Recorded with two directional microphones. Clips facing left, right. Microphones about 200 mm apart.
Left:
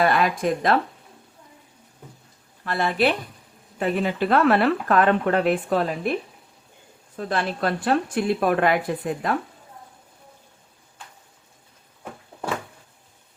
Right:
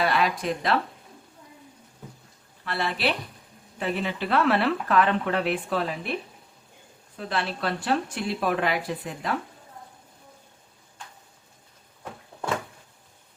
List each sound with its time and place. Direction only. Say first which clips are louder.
0.0 s speech: left 4 dB; 50° left (ahead or behind)
2.6 s speech: left 5 dB; 50° left (ahead or behind)
7.2 s speech: left 4 dB; 45° left (ahead or behind)